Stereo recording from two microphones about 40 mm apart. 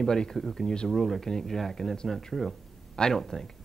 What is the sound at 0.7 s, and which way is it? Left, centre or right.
Speech, centre.